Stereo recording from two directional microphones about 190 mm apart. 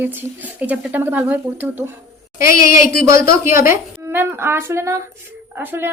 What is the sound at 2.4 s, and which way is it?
Speech, 50° left (ahead or behind).